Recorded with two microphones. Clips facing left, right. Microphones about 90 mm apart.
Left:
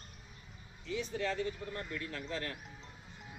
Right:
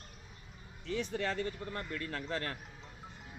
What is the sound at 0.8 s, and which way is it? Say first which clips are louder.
Speech: right 1 dB; 55° right (ahead or behind).